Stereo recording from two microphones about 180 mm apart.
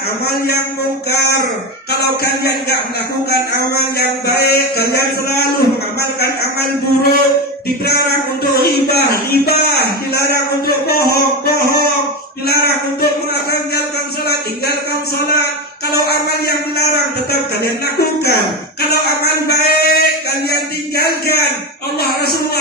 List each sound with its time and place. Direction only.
1.1 s a man's voice: 60° left (ahead or behind)
4.3 s a man's voice: 60° left (ahead or behind)
8.5 s a man's voice: 60° left (ahead or behind)
15.9 s a man's voice: 60° left (ahead or behind)